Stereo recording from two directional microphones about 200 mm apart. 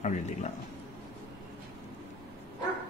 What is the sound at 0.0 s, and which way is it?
Speech, 35° left (ahead or behind).